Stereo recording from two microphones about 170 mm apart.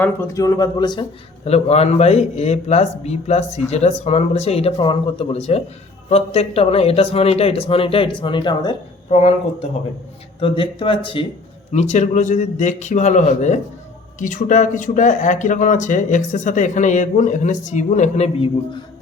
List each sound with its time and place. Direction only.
0.0 s speech: 15° left (ahead or behind)
1.5 s a man's voice: 35° left (ahead or behind)
10.4 s a man's voice: 30° left (ahead or behind)
11.7 s speech: 40° left (ahead or behind)